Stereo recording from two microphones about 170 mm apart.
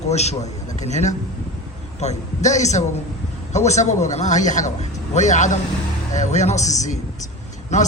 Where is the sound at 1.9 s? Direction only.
45° left (ahead or behind).